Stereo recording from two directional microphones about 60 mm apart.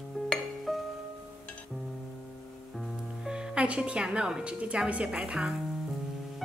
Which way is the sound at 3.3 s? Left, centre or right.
Centre.